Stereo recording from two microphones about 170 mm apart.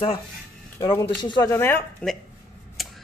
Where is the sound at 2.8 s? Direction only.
Centre (ahead or behind).